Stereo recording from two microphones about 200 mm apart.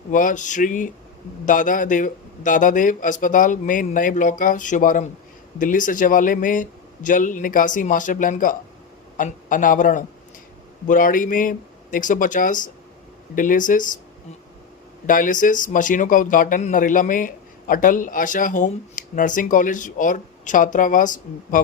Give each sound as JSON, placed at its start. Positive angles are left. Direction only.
{"t": 0.1, "sound": "speech", "side_deg": 40}
{"t": 15.0, "sound": "speech", "side_deg": 40}